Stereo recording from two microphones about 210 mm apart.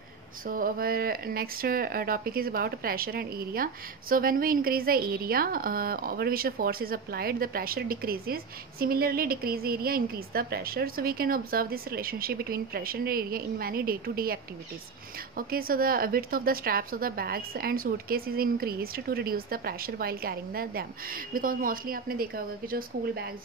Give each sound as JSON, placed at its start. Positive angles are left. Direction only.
{"t": 0.5, "sound": "speech", "side_deg": -45}